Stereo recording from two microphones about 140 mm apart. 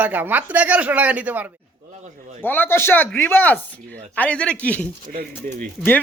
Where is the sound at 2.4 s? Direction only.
15° left (ahead or behind).